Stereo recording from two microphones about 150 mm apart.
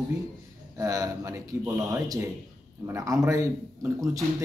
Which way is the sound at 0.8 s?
25° right (ahead or behind).